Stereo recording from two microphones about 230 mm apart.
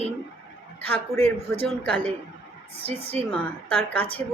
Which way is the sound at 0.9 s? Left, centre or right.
Centre.